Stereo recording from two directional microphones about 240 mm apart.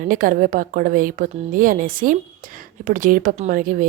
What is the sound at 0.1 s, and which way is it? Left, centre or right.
Speech, right.